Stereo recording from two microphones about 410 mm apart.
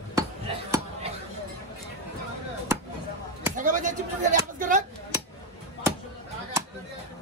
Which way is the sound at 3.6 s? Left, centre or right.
Centre.